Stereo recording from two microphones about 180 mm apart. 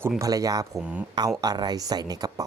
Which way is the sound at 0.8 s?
10° right (ahead or behind).